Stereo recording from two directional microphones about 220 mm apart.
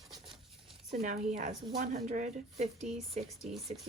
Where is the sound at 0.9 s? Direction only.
30° right (ahead or behind).